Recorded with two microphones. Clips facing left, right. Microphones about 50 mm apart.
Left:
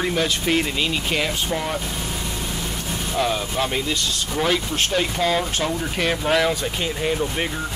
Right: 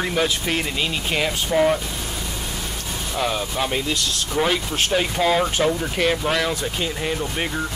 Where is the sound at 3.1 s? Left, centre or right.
Centre.